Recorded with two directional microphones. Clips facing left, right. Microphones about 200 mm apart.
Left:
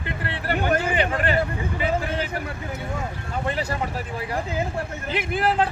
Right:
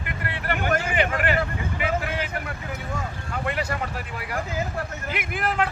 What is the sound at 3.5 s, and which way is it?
Speech, 30° left (ahead or behind).